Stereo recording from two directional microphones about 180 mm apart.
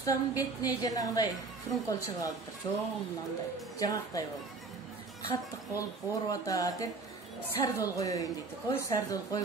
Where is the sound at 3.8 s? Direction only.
20° left (ahead or behind).